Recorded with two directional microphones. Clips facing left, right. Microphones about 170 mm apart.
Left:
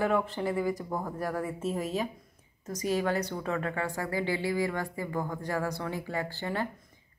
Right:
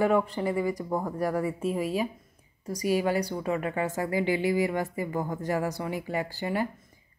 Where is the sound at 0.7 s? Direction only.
15° right (ahead or behind).